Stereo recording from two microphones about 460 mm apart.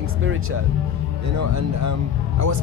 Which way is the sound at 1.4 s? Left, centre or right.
Right.